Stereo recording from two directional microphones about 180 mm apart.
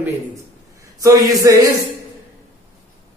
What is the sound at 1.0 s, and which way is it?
Speech, 20° right (ahead or behind).